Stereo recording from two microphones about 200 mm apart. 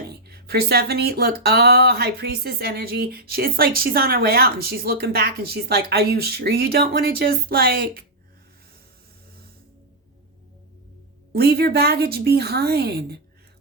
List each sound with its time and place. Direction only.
0.1 s speech: 55° right (ahead or behind)
11.3 s speech: 50° right (ahead or behind)